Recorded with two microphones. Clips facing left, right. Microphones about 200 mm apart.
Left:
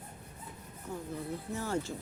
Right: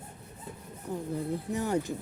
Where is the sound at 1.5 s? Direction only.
15° right (ahead or behind).